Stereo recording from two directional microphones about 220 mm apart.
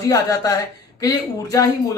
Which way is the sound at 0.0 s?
15° left (ahead or behind).